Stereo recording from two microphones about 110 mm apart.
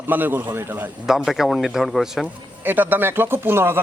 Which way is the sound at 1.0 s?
5° right (ahead or behind).